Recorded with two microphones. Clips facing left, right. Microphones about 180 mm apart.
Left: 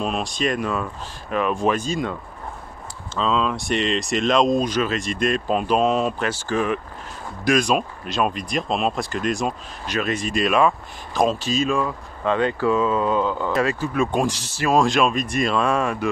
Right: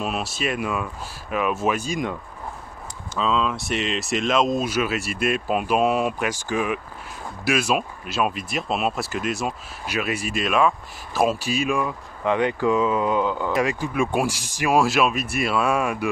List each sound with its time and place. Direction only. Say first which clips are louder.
0.0 s speech: left 3 dB; 5° right (ahead or behind)
3.2 s speech: left 1 dB; centre (ahead or behind)